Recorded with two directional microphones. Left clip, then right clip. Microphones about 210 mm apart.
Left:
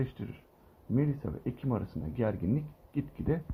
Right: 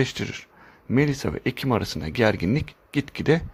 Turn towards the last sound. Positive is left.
turn(degrees=-45)  # may be behind; listen again after turning